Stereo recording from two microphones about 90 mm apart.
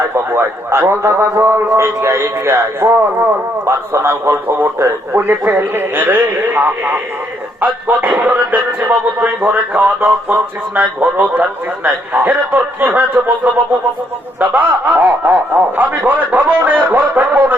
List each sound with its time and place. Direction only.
0.1 s a man's voice: 30° right (ahead or behind)